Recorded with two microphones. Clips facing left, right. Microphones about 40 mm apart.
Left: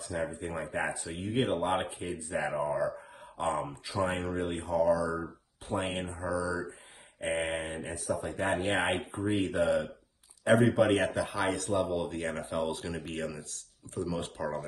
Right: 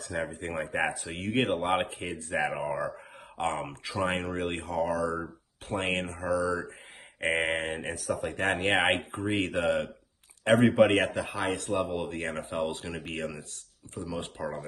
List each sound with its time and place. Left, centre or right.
0.1 s speech: right
14.0 s speech: centre